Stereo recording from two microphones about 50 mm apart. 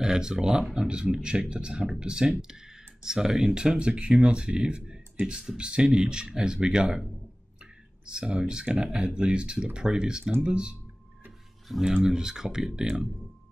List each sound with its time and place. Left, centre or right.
0.0 s speech: centre
8.1 s speech: centre
11.8 s speech: centre